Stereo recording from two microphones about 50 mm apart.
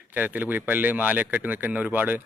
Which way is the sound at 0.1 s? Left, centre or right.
Right.